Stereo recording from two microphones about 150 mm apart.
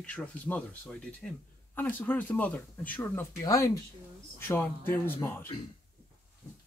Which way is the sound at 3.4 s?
25° left (ahead or behind).